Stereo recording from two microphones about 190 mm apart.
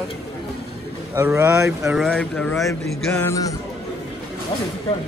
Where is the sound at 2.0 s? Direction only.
5° left (ahead or behind).